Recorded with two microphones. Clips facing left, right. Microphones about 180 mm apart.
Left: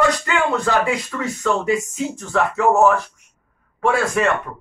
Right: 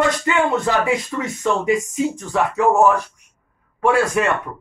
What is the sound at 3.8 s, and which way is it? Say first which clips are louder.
Speech: right 2 dB; 10° right (ahead or behind).